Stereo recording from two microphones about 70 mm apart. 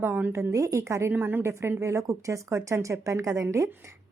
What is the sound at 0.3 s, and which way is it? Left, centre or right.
A woman's voice, right.